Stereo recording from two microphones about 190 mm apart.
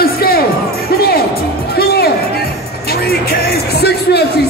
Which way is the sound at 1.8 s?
55° left (ahead or behind).